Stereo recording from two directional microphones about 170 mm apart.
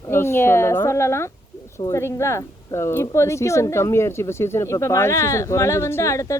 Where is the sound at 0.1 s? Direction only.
15° left (ahead or behind).